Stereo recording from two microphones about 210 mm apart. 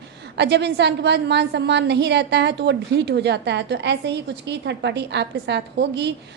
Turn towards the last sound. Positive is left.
turn(degrees=-55)  # may be behind; listen again after turning